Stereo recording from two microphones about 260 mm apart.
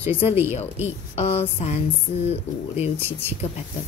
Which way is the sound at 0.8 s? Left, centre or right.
Left.